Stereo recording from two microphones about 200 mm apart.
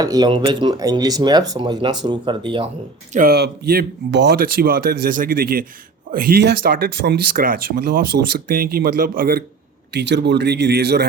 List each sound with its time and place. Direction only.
0.0 s speech: 20° right (ahead or behind)
3.1 s speech: 45° right (ahead or behind)
9.9 s speech: 60° right (ahead or behind)